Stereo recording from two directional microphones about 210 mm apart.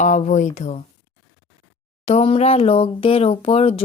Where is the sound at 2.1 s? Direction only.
30° left (ahead or behind).